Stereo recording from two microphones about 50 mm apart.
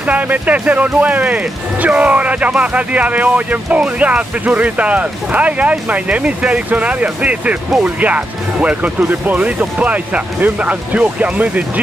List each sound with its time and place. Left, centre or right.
0.0 s speech: right